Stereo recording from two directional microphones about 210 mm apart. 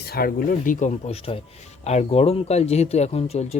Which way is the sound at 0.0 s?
45° left (ahead or behind).